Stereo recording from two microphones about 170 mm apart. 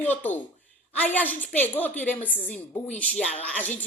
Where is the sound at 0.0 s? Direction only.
10° left (ahead or behind).